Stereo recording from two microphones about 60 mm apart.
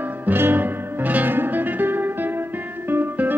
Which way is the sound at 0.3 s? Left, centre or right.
Right.